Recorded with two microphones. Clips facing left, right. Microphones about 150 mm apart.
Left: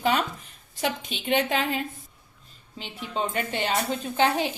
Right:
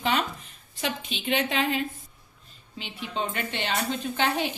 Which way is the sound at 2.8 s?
40° left (ahead or behind).